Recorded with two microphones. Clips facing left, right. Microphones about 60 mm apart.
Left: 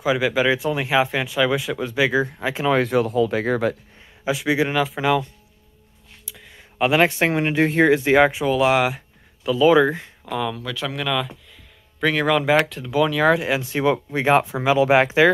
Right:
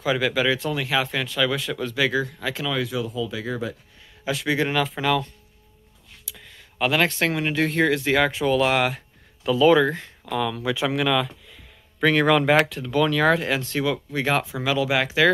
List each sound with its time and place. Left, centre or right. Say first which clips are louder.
0.0 s speech: left 3 dB; centre
2.6 s speech: left 9 dB; left
4.2 s speech: left 3 dB; centre
6.5 s speech: left 4 dB; centre
10.6 s speech: right 4 dB; centre
11.0 s speech: right 2 dB; centre
13.8 s speech: left 7 dB; left